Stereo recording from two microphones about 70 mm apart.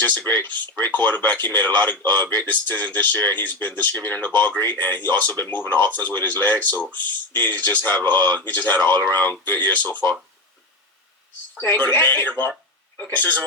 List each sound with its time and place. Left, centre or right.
0.3 s speech: left
11.6 s speech: left